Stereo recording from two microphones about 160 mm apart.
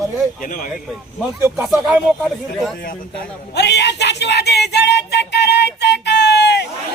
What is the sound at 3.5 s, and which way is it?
Speech, 90° left.